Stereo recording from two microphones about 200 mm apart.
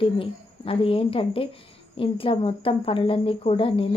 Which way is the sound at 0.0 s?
25° left (ahead or behind).